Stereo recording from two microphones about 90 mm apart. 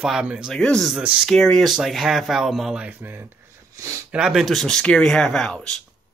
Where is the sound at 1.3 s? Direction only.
5° left (ahead or behind).